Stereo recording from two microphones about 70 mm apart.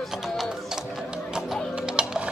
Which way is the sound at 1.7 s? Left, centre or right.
Centre.